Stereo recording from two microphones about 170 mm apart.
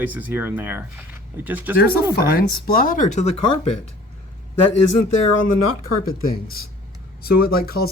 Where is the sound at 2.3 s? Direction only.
60° left (ahead or behind); by 3.9 s 40° left (ahead or behind).